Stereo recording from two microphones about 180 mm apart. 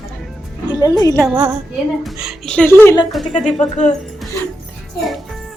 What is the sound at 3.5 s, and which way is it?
Speech, 40° left (ahead or behind).